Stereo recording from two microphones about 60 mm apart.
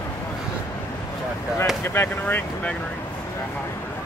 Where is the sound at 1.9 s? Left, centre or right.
Left.